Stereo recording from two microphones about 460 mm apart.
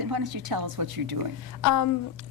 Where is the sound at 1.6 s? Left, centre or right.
Left.